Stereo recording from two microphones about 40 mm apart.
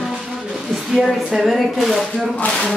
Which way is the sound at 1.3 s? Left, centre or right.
Centre.